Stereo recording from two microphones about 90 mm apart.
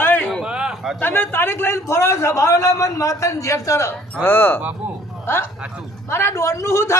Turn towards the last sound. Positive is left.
turn(degrees=30)  # may be behind; listen again after turning